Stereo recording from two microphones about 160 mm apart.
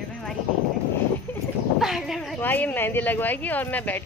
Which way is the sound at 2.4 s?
10° left (ahead or behind).